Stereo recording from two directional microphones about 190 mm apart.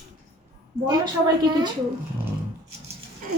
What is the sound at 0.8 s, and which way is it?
Speech, 25° right (ahead or behind).